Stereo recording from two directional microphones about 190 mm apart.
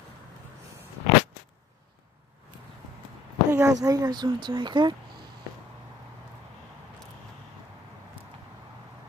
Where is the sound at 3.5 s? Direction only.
15° right (ahead or behind).